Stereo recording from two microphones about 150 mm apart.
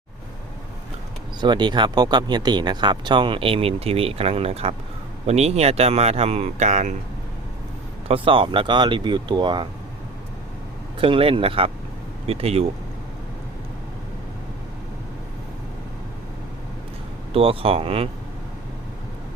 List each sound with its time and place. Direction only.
1.4 s speech: 30° right (ahead or behind); by 6.9 s 50° right (ahead or behind)
8.0 s speech: 35° right (ahead or behind)
11.0 s speech: 35° right (ahead or behind)
17.3 s speech: 40° right (ahead or behind)